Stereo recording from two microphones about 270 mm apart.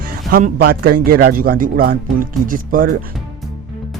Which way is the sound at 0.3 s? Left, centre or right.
Right.